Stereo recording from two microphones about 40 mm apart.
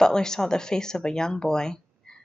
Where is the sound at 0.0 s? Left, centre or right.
Centre.